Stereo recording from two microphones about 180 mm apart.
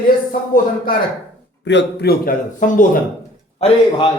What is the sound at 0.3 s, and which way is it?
Speech, 50° left (ahead or behind).